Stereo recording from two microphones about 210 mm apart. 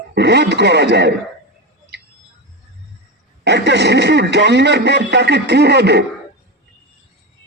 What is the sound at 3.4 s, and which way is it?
A man's voice, 55° right (ahead or behind).